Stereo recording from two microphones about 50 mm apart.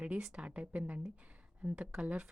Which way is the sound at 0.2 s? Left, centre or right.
Centre.